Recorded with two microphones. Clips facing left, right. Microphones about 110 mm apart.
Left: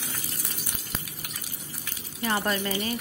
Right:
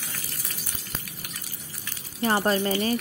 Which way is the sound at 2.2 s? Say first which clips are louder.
Right 4 dB; 30° right (ahead or behind).